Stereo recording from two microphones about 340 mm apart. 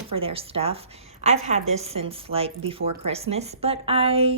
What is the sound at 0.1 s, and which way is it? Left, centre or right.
A woman's voice, centre.